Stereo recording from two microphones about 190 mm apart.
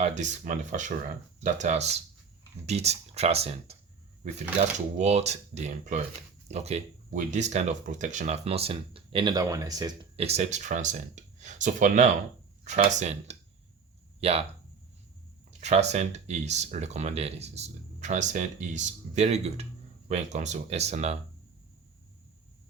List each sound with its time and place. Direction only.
0.0 s speech: 40° right (ahead or behind)
4.9 s speech: 35° right (ahead or behind)
15.6 s speech: 35° right (ahead or behind)